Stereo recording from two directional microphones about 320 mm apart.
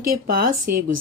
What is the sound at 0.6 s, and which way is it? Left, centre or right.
Speech, right.